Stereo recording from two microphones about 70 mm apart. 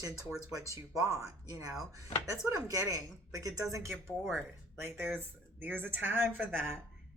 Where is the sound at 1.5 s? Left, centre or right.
Right.